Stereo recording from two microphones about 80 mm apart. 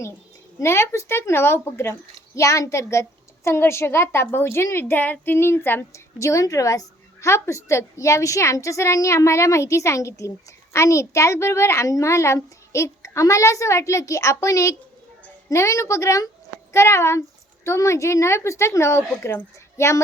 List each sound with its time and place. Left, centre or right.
0.6 s a child's voice: left
6.1 s a child's voice: left